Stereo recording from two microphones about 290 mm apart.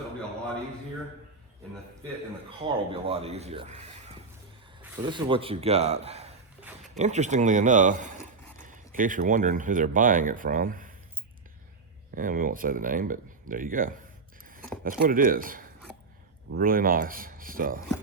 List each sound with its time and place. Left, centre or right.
2.6 s speech: centre
12.1 s speech: right